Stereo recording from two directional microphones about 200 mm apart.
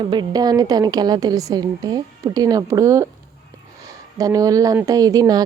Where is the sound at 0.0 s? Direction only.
20° right (ahead or behind).